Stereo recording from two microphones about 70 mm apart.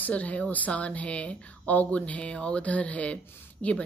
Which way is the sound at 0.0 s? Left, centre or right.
Left.